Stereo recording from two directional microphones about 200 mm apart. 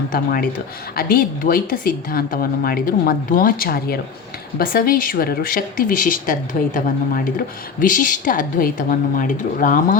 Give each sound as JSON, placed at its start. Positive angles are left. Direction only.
{"t": 0.1, "sound": "a woman's voice", "side_deg": 45}